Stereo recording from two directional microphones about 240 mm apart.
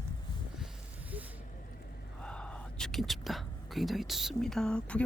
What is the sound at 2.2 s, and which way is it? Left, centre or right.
Speech, centre.